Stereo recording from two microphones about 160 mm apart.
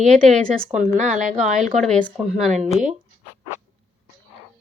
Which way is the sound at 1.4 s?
Centre (ahead or behind).